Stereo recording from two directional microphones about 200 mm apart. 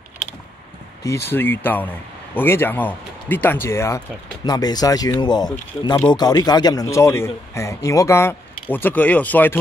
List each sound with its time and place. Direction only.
1.0 s a man's voice: 10° left (ahead or behind)